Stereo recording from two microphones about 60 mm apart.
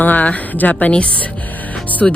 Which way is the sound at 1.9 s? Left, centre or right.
Left.